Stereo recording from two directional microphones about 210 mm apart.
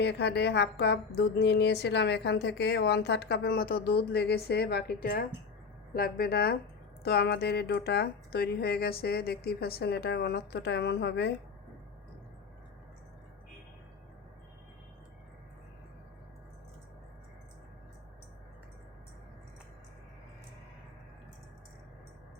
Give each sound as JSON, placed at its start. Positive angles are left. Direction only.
{"t": 0.0, "sound": "speech", "side_deg": 55}